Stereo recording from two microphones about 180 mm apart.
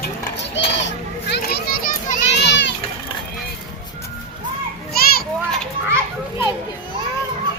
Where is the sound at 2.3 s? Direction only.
75° left (ahead or behind).